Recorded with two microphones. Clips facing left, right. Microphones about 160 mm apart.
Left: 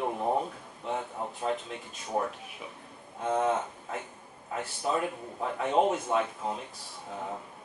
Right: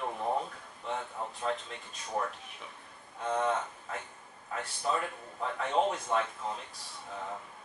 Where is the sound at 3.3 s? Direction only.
15° left (ahead or behind).